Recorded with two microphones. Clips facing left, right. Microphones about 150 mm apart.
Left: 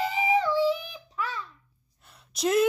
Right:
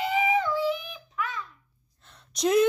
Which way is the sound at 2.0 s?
5° left (ahead or behind).